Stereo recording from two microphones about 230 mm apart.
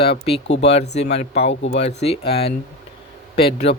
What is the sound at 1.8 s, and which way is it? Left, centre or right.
Speech, left.